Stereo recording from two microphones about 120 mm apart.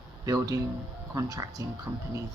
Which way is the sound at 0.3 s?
30° right (ahead or behind).